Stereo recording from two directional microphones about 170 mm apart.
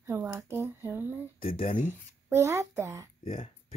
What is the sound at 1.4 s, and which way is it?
Speech, 55° left (ahead or behind).